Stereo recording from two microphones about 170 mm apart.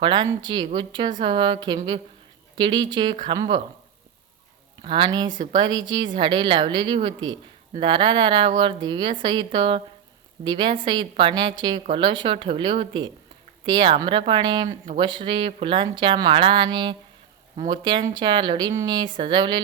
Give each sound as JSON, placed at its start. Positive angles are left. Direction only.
{"t": 0.0, "sound": "speech", "side_deg": -30}
{"t": 4.8, "sound": "speech", "side_deg": -25}
{"t": 5.3, "sound": "a woman's voice", "side_deg": -45}
{"t": 5.5, "sound": "speech", "side_deg": -30}